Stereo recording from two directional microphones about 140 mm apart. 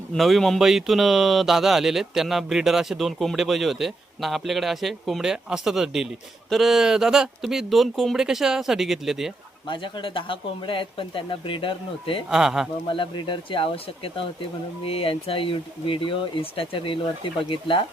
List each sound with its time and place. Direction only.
0.1 s speech: centre (ahead or behind)
9.6 s speech: 35° left (ahead or behind)
12.3 s speech: 5° right (ahead or behind)
12.9 s speech: 35° left (ahead or behind)